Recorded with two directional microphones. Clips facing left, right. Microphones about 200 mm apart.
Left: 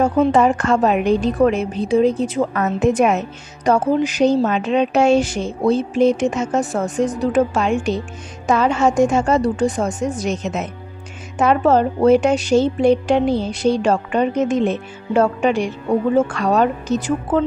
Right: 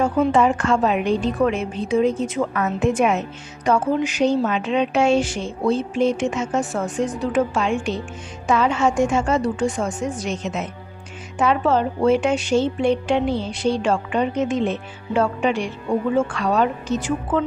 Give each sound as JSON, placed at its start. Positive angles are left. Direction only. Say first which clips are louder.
{"t": 0.0, "sound": "a woman's voice", "louder": "left 3 dB", "side_deg": 40}